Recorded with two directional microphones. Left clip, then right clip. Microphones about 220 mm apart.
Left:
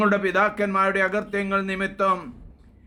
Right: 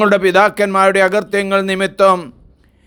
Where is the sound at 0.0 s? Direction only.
45° right (ahead or behind).